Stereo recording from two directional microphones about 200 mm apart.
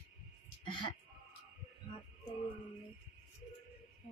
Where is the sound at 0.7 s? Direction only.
25° left (ahead or behind).